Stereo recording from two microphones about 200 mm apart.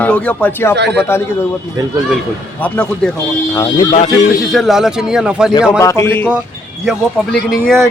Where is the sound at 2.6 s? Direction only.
5° left (ahead or behind).